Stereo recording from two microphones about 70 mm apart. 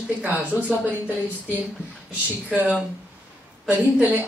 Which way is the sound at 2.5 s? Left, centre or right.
Right.